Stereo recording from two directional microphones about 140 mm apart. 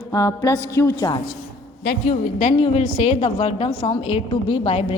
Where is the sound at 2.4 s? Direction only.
50° left (ahead or behind).